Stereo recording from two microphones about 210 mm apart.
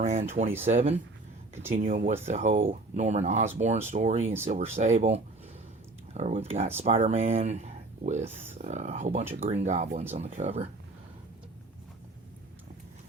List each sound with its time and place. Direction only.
0.0 s speech: 35° right (ahead or behind)